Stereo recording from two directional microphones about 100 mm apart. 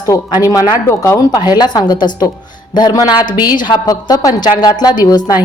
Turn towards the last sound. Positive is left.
turn(degrees=40)  # may be behind; listen again after turning